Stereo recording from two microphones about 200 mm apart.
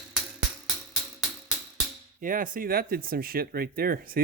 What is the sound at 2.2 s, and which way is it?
Speech, 45° right (ahead or behind).